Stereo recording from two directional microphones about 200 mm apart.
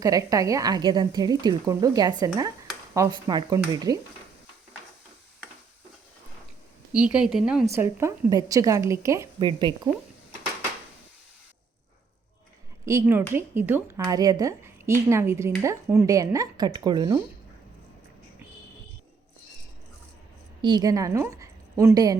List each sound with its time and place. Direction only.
0.0 s a woman's voice: 15° right (ahead or behind)
6.9 s speech: 5° right (ahead or behind); by 9.9 s 25° right (ahead or behind)
12.8 s speech: 15° right (ahead or behind)
20.6 s a woman's voice: 20° right (ahead or behind)